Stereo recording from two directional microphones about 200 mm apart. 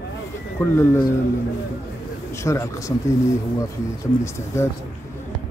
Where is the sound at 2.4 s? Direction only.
15° left (ahead or behind).